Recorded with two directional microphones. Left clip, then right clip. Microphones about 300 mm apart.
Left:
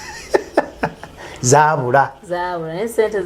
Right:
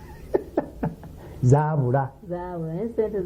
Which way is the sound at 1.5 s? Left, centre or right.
Centre.